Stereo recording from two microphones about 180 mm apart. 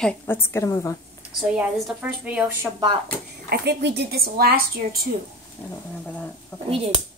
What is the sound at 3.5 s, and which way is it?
Speech, 65° right (ahead or behind).